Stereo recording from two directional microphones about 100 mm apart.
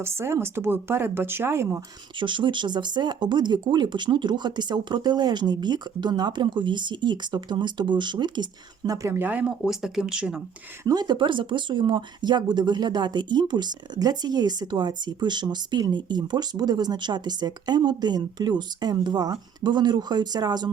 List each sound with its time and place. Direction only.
0.0 s speech: 25° right (ahead or behind)
2.1 s speech: 55° right (ahead or behind)
9.0 s speech: 30° right (ahead or behind)
9.2 s speech: 15° right (ahead or behind)
10.8 s speech: 45° right (ahead or behind)